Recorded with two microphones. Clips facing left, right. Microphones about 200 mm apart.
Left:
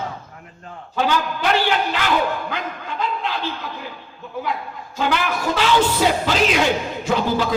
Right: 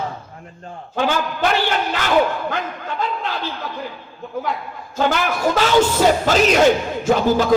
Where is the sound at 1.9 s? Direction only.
45° right (ahead or behind).